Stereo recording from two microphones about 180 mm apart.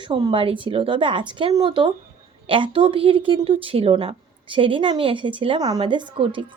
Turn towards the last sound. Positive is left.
turn(degrees=-30)  # may be behind; listen again after turning